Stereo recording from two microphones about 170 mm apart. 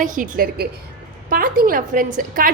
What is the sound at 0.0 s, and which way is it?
A woman's voice, 50° right (ahead or behind).